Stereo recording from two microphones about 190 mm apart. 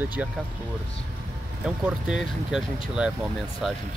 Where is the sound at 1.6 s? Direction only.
5° right (ahead or behind).